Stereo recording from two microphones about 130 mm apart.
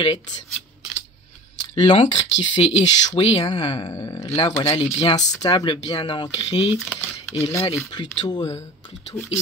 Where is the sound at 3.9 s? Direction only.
20° left (ahead or behind).